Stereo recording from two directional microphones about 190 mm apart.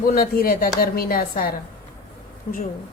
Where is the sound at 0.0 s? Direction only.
50° left (ahead or behind).